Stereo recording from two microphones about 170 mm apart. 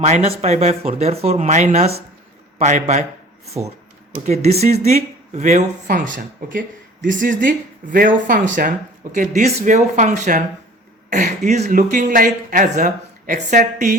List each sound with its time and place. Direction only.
0.0 s speech: 40° right (ahead or behind)
4.1 s speech: 40° right (ahead or behind)